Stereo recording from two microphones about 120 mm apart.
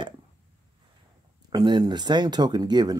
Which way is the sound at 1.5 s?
35° right (ahead or behind).